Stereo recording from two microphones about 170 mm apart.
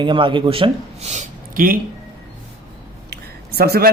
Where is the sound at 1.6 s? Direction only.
55° right (ahead or behind).